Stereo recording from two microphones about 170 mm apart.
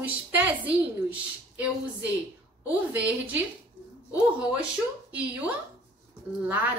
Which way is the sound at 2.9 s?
10° right (ahead or behind).